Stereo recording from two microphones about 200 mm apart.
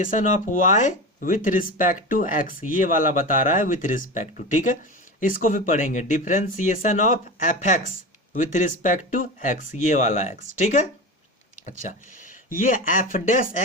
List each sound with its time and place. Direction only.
0.0 s speech: 40° left (ahead or behind)